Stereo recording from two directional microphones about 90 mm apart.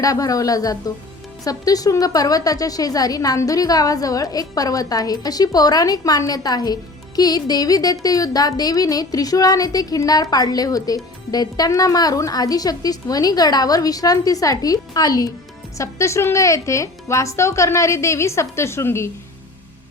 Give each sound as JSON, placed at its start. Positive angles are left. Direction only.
{"t": 0.0, "sound": "a woman's voice", "side_deg": 40}
{"t": 15.8, "sound": "a woman's voice", "side_deg": 35}